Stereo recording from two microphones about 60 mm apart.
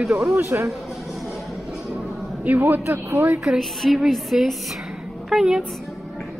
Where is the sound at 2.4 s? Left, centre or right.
Right.